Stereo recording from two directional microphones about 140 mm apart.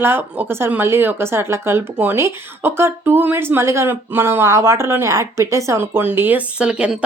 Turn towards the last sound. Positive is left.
turn(degrees=-5)  # may be behind; listen again after turning